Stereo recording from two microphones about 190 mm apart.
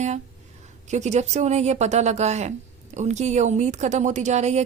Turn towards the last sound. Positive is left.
turn(degrees=-35)  # may be behind; listen again after turning